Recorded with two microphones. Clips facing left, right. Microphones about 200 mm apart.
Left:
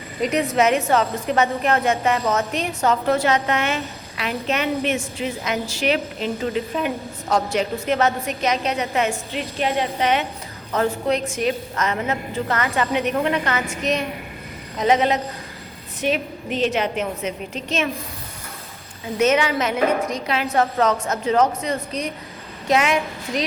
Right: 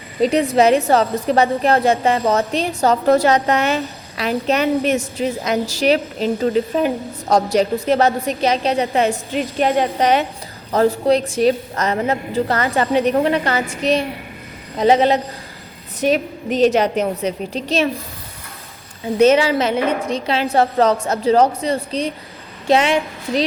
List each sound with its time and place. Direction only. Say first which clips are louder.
0.2 s a woman's voice: right 5 dB; 30° right (ahead or behind)
9.3 s a woman's voice: right 6 dB; 45° right (ahead or behind)
19.2 s a woman's voice: right 5 dB; 30° right (ahead or behind)